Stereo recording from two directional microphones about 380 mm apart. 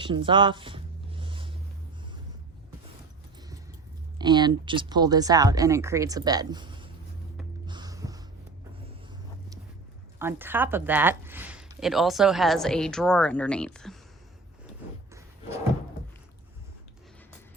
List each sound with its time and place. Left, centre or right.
0.0 s a sound: centre
4.2 s speech: centre
7.7 s music: centre
10.2 s speech: centre